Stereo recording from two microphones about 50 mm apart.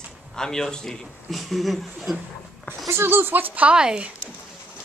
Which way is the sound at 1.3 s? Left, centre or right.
Centre.